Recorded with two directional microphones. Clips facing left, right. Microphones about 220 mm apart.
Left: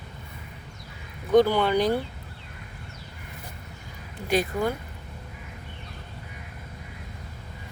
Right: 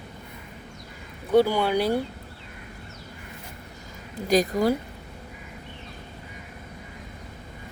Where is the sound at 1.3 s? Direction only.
10° right (ahead or behind).